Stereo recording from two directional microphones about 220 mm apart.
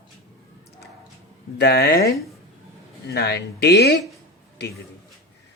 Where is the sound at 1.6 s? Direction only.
45° left (ahead or behind).